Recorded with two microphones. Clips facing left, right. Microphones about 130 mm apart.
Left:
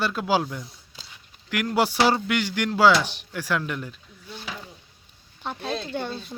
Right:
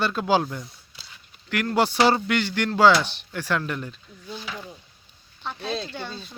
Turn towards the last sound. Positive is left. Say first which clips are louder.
# left 5 dB
turn(degrees=50)  # may be behind; listen again after turning